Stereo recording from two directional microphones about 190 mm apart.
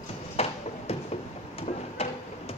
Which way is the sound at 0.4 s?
35° left (ahead or behind).